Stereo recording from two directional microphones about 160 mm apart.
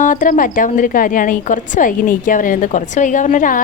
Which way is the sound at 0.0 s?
55° left (ahead or behind).